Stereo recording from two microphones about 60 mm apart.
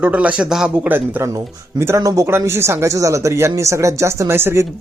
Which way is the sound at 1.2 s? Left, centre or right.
Right.